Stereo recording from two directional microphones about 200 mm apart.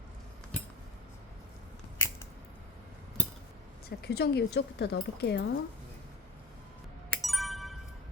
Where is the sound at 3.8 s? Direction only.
55° left (ahead or behind).